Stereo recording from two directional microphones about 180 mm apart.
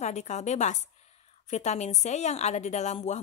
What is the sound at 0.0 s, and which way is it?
A woman's voice, 40° left (ahead or behind).